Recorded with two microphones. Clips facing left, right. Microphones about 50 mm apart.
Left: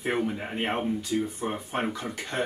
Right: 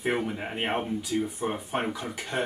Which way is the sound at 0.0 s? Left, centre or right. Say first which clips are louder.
Even; centre.